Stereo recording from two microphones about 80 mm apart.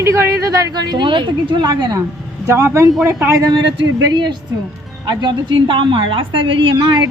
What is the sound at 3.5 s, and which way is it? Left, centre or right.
Speech, right.